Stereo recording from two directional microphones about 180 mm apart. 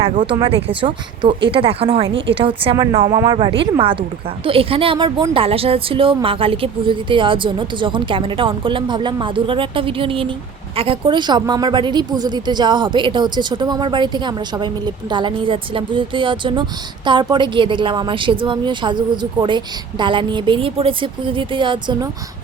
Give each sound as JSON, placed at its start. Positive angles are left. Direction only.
{"t": 0.0, "sound": "a woman's voice", "side_deg": -30}